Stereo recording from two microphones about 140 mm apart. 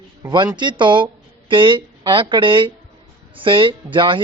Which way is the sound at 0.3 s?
35° right (ahead or behind).